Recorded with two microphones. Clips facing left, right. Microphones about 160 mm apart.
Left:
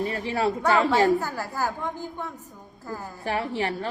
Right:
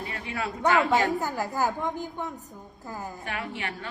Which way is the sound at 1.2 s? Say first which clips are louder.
Right 1 dB; 20° right (ahead or behind).